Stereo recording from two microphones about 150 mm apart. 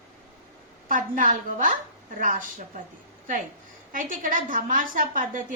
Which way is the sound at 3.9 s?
60° right (ahead or behind).